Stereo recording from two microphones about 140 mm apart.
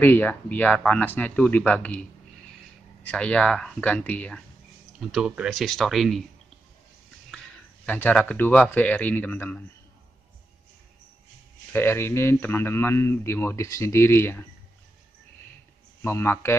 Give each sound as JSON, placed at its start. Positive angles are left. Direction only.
{"t": 0.0, "sound": "a man's voice", "side_deg": 10}
{"t": 5.1, "sound": "speech", "side_deg": -5}
{"t": 7.3, "sound": "a sound", "side_deg": 5}
{"t": 7.8, "sound": "a man's voice", "side_deg": 10}
{"t": 11.7, "sound": "a man's voice", "side_deg": 15}
{"t": 16.0, "sound": "a man's voice", "side_deg": 15}